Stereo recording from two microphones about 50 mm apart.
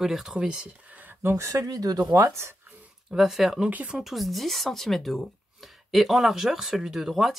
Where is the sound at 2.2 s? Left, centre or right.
Right.